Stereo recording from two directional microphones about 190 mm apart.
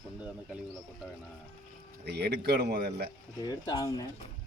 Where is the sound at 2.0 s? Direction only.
60° right (ahead or behind).